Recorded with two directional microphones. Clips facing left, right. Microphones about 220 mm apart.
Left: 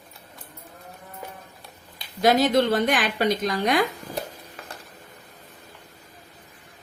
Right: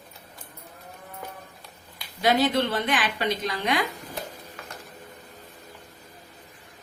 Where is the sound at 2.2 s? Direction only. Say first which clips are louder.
Left 3 dB; 45° left (ahead or behind).